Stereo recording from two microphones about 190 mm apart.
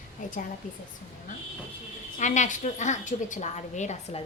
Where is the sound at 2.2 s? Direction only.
40° left (ahead or behind).